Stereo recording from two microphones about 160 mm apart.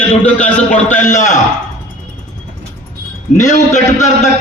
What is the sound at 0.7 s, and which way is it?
Speech, 50° left (ahead or behind).